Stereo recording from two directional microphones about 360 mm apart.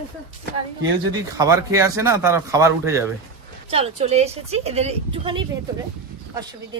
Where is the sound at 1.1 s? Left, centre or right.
Centre.